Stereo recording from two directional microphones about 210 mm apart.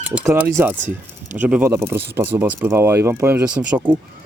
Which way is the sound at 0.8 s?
35° right (ahead or behind).